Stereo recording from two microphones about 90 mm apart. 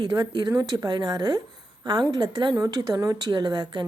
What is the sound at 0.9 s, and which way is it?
Speech, 50° right (ahead or behind).